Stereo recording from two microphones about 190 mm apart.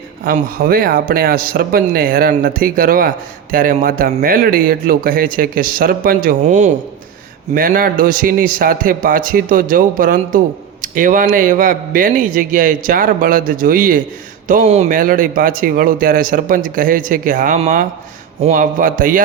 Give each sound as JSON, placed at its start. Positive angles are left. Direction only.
{"t": 0.3, "sound": "a man's voice", "side_deg": -50}